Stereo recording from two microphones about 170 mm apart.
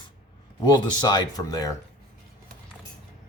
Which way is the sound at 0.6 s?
25° left (ahead or behind).